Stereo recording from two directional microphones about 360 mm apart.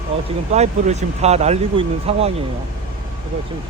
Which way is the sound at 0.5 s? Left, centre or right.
Centre.